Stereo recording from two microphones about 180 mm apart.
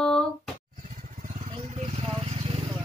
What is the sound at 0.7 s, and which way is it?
Vehicle, 45° right (ahead or behind).